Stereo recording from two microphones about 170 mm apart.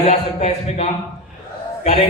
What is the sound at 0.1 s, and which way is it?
A man's voice, 40° left (ahead or behind).